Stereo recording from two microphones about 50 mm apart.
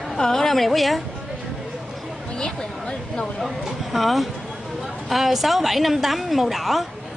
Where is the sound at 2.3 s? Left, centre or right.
Left.